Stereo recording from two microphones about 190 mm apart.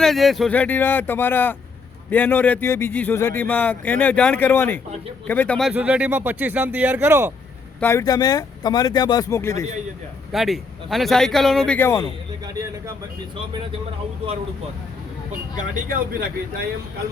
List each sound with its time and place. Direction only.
0.0 s speech: centre (ahead or behind)
7.8 s speech: 15° left (ahead or behind)
10.3 s a man's voice: centre (ahead or behind); by 12.1 s 15° left (ahead or behind)
15.5 s speech: 40° right (ahead or behind)